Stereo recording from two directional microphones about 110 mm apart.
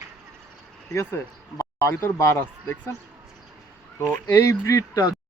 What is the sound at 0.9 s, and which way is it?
Speech, 20° left (ahead or behind).